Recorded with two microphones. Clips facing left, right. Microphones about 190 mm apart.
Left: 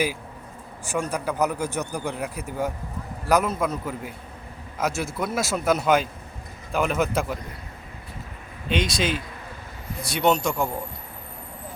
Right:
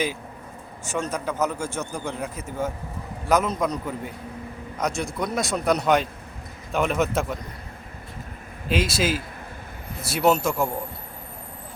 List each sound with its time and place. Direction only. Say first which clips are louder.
0.9 s a man's voice: left 1 dB; 10° left (ahead or behind)
8.7 s a man's voice: right 1 dB; 5° right (ahead or behind)